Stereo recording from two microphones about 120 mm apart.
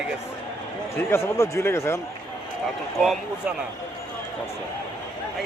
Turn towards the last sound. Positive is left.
turn(degrees=0)  # may be behind; listen again after turning